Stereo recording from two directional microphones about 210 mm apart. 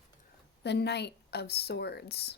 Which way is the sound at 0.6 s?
55° left (ahead or behind).